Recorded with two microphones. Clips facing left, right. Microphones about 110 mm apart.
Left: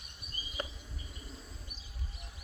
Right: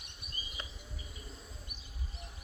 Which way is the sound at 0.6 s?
45° left (ahead or behind).